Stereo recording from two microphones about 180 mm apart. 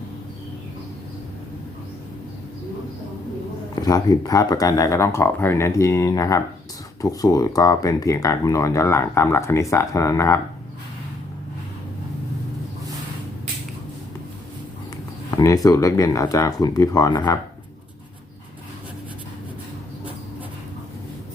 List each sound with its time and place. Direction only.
3.8 s speech: 20° left (ahead or behind)
15.4 s speech: 20° left (ahead or behind)